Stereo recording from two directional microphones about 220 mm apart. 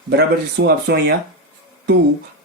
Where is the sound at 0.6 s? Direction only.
50° right (ahead or behind).